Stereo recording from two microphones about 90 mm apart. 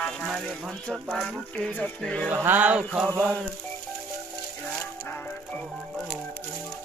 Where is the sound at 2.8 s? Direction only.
5° left (ahead or behind).